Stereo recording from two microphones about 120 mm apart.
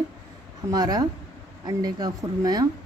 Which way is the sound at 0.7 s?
35° right (ahead or behind).